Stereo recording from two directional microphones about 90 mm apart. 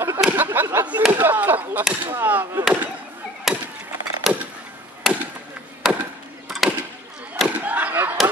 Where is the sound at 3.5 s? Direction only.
5° right (ahead or behind).